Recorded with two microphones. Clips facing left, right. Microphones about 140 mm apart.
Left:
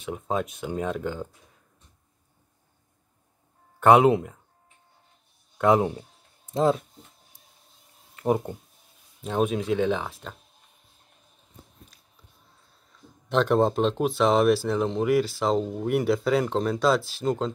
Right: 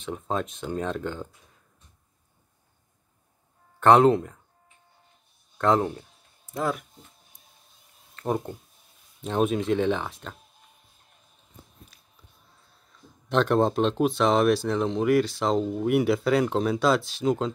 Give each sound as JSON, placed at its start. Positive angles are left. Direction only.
{"t": 0.0, "sound": "speech", "side_deg": 5}
{"t": 3.8, "sound": "speech", "side_deg": 5}
{"t": 5.6, "sound": "speech", "side_deg": 15}
{"t": 8.2, "sound": "speech", "side_deg": 10}
{"t": 9.2, "sound": "speech", "side_deg": 0}
{"t": 13.3, "sound": "speech", "side_deg": 0}